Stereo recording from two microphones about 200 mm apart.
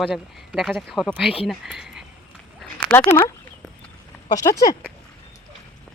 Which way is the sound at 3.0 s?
25° left (ahead or behind).